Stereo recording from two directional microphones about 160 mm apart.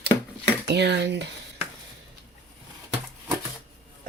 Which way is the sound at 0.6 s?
90° right.